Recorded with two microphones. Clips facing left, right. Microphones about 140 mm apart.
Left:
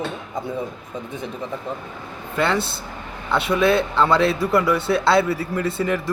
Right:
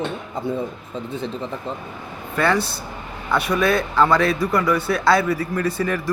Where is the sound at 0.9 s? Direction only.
15° left (ahead or behind).